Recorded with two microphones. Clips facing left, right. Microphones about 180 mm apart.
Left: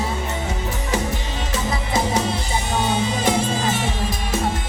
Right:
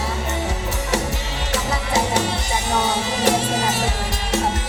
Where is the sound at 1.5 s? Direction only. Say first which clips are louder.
Right 1 dB; 75° right (ahead or behind).